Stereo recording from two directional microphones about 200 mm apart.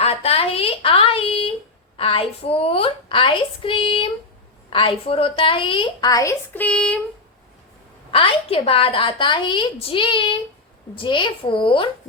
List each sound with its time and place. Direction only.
0.0 s a sound: 30° left (ahead or behind)
2.0 s a woman's voice: 25° left (ahead or behind); by 7.0 s 5° left (ahead or behind)
8.1 s a woman's voice: 30° left (ahead or behind)